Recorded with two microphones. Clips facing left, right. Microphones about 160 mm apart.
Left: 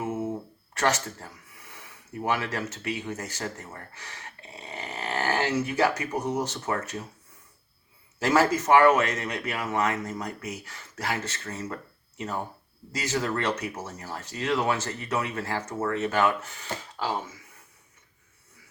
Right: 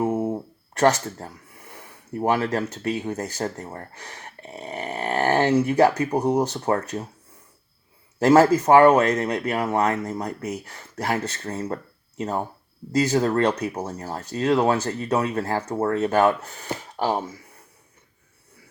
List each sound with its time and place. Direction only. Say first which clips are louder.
0.0 s a sound: right 7 dB; 35° right (ahead or behind)
1.7 s speech: right 6 dB; 35° right (ahead or behind)
4.5 s dog: right 7 dB; 35° right (ahead or behind)
4.9 s a sound: right 7 dB; 55° right (ahead or behind)
5.5 s speech: right 7 dB; 30° right (ahead or behind)
8.2 s speech: right 7 dB; 35° right (ahead or behind)